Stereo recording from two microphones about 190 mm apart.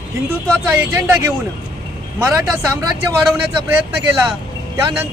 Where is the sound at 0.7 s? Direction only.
10° right (ahead or behind).